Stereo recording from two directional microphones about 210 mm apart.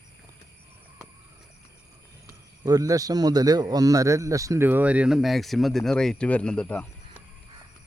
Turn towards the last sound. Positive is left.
turn(degrees=5)  # may be behind; listen again after turning